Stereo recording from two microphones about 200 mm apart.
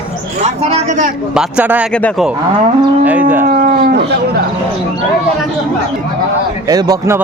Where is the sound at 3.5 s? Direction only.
45° right (ahead or behind).